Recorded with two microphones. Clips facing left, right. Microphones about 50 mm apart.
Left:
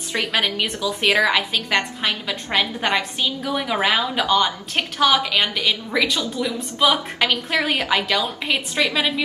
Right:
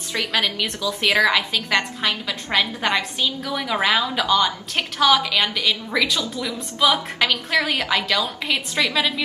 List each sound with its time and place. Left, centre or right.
0.4 s a woman's voice: centre
3.2 s a woman's voice: centre
3.7 s a woman's voice: centre